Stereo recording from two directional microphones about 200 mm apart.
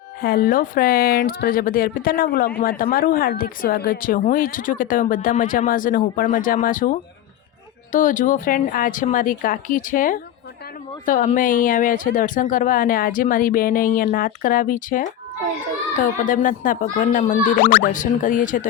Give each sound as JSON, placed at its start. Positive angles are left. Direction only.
{"t": 0.2, "sound": "speech", "side_deg": 50}